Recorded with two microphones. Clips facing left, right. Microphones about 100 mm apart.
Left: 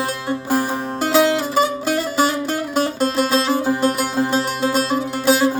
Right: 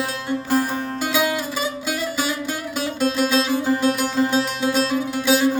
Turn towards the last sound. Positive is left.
turn(degrees=45)  # may be behind; listen again after turning